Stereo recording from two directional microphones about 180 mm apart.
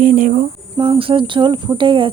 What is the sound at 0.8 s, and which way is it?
Speech, 30° right (ahead or behind).